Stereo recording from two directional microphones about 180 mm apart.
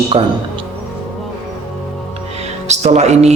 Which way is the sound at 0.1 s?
30° right (ahead or behind).